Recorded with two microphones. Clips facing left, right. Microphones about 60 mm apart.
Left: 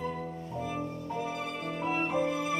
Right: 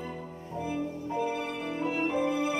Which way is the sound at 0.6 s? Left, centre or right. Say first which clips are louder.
Right 3 dB; left.